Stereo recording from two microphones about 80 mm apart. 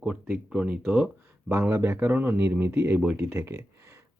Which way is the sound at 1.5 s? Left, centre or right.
Right.